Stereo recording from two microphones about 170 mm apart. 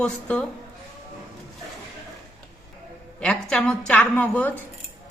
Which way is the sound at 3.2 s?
5° left (ahead or behind).